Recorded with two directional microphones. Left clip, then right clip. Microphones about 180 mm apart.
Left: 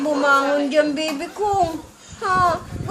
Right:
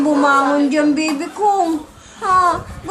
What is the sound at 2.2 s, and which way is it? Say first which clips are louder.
Speech: right 4 dB; 30° left (ahead or behind).